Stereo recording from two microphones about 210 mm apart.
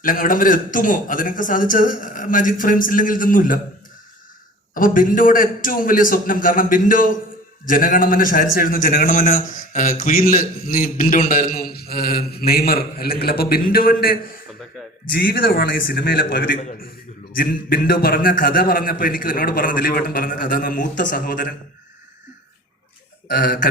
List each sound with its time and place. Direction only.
0.0 s a man's voice: 40° left (ahead or behind)
4.7 s a man's voice: 40° left (ahead or behind)
15.2 s a man's voice: 45° left (ahead or behind)
23.3 s a man's voice: 45° left (ahead or behind)